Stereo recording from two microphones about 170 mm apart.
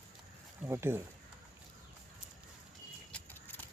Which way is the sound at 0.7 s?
15° right (ahead or behind).